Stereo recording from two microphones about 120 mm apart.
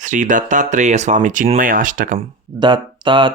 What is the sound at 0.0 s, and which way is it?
Speech, 90° right.